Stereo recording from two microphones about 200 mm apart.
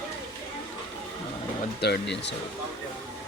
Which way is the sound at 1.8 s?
55° left (ahead or behind).